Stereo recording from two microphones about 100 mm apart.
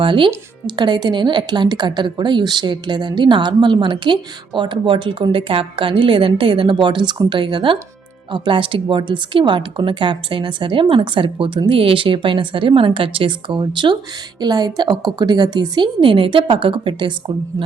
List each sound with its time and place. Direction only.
0.0 s a woman's voice: 55° right (ahead or behind)